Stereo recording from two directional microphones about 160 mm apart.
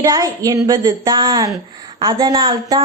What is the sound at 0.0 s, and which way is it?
A woman's voice, 20° right (ahead or behind).